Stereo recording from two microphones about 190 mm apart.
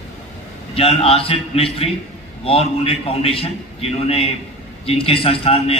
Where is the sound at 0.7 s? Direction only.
30° left (ahead or behind).